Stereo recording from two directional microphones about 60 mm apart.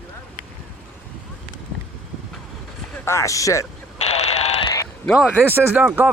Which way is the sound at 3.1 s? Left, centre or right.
Left.